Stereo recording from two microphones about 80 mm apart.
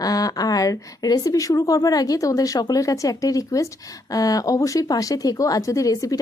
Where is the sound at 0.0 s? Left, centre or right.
Left.